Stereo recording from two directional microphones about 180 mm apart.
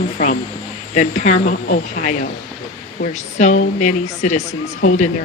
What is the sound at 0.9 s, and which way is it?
Speech, 40° left (ahead or behind).